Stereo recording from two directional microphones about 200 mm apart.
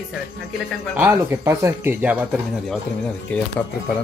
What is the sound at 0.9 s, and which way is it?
Speech, 10° right (ahead or behind).